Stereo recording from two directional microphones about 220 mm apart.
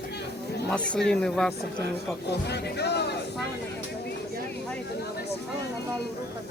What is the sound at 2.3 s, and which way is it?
Speech, 50° left (ahead or behind).